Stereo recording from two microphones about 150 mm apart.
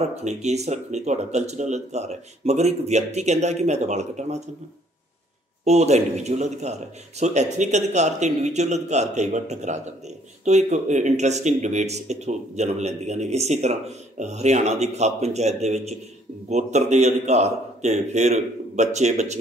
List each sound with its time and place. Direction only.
0.0 s speech: 50° right (ahead or behind)
5.7 s speech: 45° right (ahead or behind)